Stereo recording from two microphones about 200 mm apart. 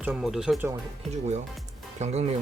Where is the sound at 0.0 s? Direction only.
Centre (ahead or behind).